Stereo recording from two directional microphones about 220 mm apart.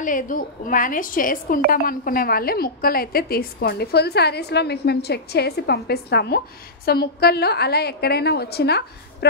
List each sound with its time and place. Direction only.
0.0 s a woman's voice: 40° left (ahead or behind)